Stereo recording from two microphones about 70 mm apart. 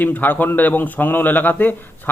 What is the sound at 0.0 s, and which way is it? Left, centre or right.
Speech, left.